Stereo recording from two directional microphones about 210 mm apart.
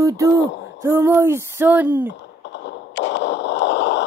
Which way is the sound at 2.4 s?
55° left (ahead or behind).